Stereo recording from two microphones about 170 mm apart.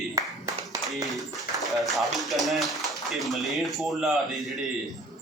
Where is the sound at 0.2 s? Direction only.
20° right (ahead or behind).